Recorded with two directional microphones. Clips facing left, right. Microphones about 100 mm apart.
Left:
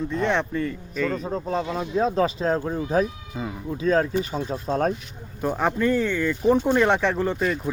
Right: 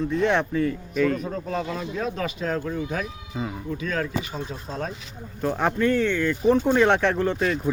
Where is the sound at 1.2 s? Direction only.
25° left (ahead or behind).